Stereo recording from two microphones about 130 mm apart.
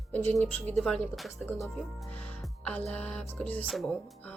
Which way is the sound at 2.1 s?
10° left (ahead or behind).